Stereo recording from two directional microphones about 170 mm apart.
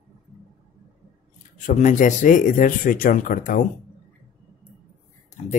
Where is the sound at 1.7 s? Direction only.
45° left (ahead or behind).